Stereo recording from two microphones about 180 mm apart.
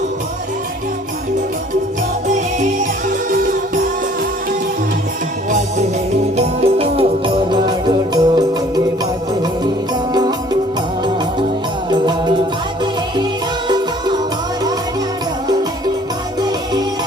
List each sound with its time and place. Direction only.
5.5 s music: 40° right (ahead or behind); by 8.8 s 25° right (ahead or behind)
10.1 s music: 25° right (ahead or behind)
11.9 s music: 25° right (ahead or behind)
13.7 s music: 25° right (ahead or behind)